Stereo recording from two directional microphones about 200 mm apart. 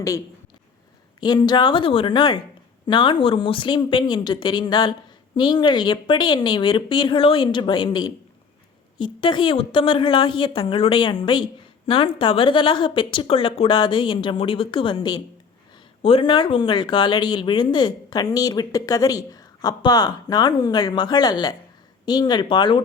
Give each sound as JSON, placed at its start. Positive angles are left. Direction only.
{"t": 1.2, "sound": "speech", "side_deg": 20}